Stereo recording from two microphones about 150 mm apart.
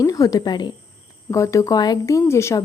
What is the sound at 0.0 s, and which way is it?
A woman's voice, 25° left (ahead or behind).